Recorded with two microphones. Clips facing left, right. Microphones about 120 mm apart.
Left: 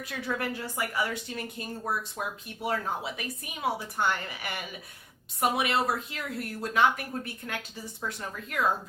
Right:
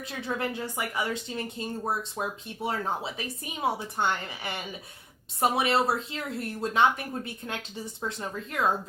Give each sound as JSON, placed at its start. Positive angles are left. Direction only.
{"t": 0.0, "sound": "speech", "side_deg": -25}